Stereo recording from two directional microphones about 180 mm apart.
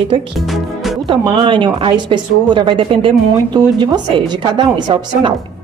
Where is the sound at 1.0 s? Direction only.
30° right (ahead or behind).